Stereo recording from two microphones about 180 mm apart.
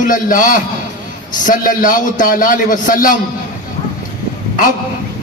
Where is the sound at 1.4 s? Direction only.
50° left (ahead or behind).